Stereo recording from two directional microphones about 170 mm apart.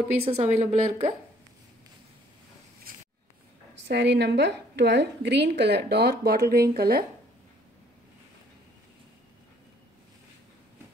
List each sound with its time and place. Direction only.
0.2 s a woman's voice: 40° right (ahead or behind)
2.9 s a sound: 55° right (ahead or behind)
3.8 s a woman's voice: 90° right; by 7.1 s 65° right (ahead or behind)